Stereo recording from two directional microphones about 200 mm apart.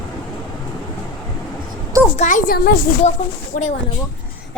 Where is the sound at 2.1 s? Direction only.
40° left (ahead or behind).